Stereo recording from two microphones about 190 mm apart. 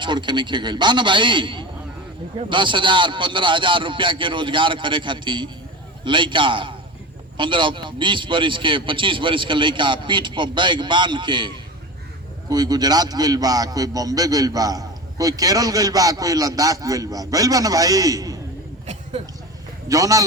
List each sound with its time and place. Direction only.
0.0 s a man's voice: 25° right (ahead or behind)
19.9 s speech: 20° right (ahead or behind)